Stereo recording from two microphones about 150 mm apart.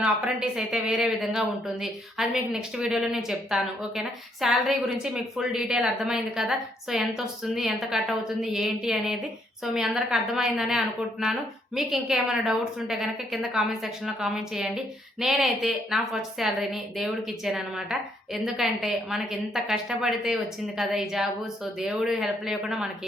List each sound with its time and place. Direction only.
0.0 s a woman's voice: 5° right (ahead or behind)